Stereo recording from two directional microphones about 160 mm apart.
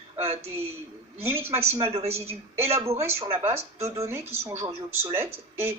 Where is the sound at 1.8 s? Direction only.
40° right (ahead or behind).